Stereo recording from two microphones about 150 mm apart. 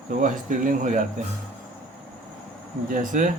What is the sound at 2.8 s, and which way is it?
Speech, 65° right (ahead or behind).